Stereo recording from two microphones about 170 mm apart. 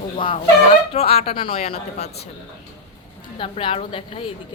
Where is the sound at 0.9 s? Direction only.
35° left (ahead or behind).